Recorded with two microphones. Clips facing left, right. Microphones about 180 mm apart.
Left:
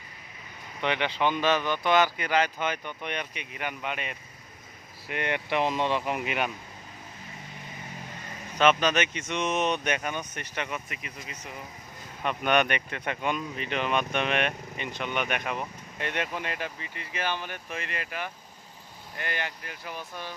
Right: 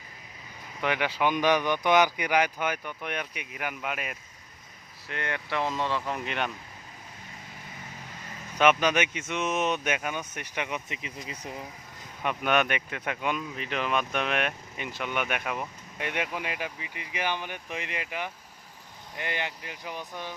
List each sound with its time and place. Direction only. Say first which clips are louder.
0.8 s speech: even; 5° right (ahead or behind)
5.0 s speech: left 4 dB; 20° left (ahead or behind)
8.5 s speech: even; 10° right (ahead or behind)
12.2 s speech: left 1 dB; 5° right (ahead or behind)